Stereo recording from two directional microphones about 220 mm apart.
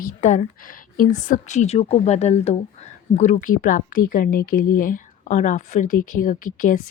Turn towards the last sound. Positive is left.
turn(degrees=40)  # may be behind; listen again after turning